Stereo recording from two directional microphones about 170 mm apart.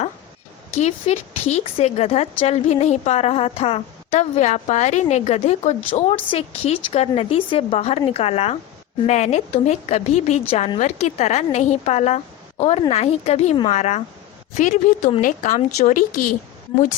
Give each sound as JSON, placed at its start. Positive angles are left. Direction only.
{"t": 0.7, "sound": "a woman's voice", "side_deg": 40}